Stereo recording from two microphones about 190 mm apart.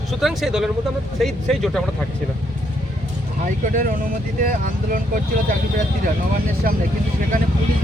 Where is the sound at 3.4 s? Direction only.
45° right (ahead or behind).